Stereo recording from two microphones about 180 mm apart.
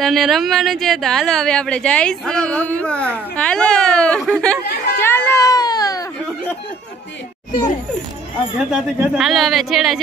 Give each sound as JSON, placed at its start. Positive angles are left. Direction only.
{"t": 0.0, "sound": "speech", "side_deg": 0}
{"t": 5.0, "sound": "a sound", "side_deg": 15}
{"t": 8.6, "sound": "speech", "side_deg": -5}